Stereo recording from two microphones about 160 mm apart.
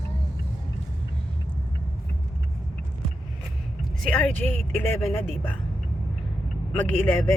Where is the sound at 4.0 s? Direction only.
5° left (ahead or behind).